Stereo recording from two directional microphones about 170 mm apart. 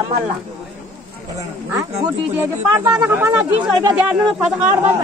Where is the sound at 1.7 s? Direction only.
15° right (ahead or behind).